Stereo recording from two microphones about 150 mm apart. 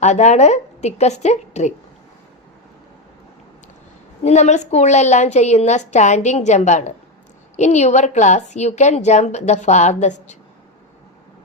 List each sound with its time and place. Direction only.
0.0 s a woman's voice: 50° left (ahead or behind)
4.2 s a woman's voice: 50° left (ahead or behind)